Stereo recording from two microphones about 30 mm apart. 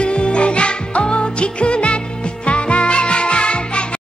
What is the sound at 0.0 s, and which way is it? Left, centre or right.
Music, left.